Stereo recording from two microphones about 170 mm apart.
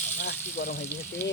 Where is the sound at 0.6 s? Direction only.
40° left (ahead or behind).